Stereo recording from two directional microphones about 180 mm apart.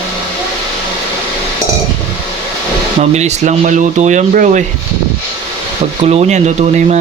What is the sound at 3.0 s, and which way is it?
A man's voice, 40° right (ahead or behind).